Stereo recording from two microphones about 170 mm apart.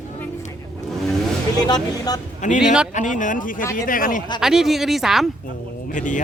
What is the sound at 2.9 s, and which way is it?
Speech, 45° left (ahead or behind).